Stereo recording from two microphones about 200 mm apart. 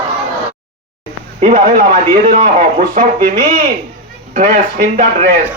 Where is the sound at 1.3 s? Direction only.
40° right (ahead or behind).